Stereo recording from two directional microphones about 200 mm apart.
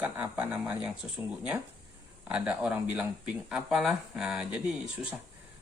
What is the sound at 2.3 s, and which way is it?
Speech, 5° right (ahead or behind).